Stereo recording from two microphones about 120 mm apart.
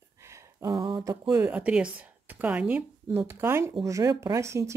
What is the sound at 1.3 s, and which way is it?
Speech, 15° right (ahead or behind).